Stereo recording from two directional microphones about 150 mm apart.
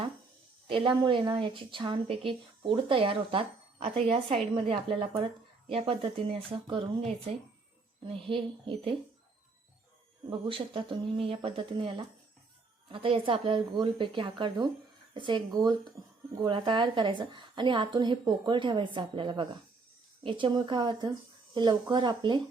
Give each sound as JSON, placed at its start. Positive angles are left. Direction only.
{"t": 0.7, "sound": "speech", "side_deg": -35}
{"t": 8.1, "sound": "speech", "side_deg": -35}
{"t": 10.5, "sound": "speech", "side_deg": -35}